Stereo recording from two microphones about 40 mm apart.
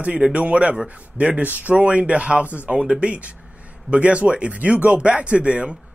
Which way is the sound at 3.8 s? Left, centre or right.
Right.